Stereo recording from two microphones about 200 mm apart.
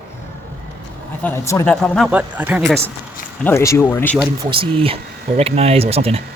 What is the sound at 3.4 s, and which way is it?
Speech, 15° left (ahead or behind).